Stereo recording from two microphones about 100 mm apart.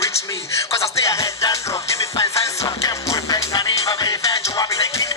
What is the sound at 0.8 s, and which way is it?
Music, 30° left (ahead or behind).